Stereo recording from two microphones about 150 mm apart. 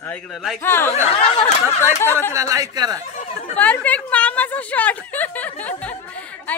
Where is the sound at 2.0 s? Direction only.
15° left (ahead or behind).